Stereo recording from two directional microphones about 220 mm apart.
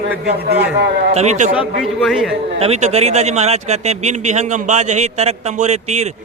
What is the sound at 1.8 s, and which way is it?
Speech, centre (ahead or behind).